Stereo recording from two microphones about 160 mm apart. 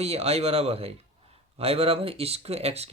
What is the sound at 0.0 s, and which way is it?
Speech, 40° right (ahead or behind).